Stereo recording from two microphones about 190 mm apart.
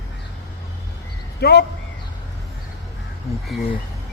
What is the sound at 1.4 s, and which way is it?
Speech, 60° left (ahead or behind).